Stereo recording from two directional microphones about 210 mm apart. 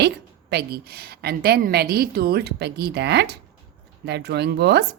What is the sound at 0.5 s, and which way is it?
Speech, 50° right (ahead or behind).